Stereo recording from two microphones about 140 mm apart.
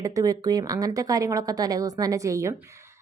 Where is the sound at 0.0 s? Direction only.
25° right (ahead or behind).